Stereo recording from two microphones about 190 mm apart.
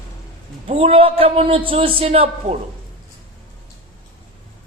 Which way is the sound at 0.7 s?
30° right (ahead or behind).